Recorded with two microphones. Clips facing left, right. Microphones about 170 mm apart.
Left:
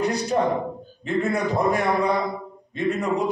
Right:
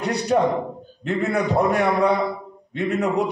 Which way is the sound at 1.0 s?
65° right (ahead or behind).